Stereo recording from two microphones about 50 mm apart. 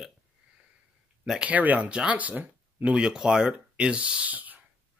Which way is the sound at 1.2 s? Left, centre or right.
Centre.